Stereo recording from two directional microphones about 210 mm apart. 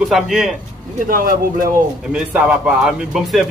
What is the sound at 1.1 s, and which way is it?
Speech, 40° right (ahead or behind).